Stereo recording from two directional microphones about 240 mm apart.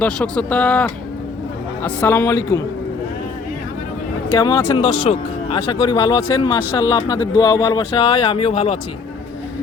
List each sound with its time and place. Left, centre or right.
0.0 s speech: centre
4.4 s speech: centre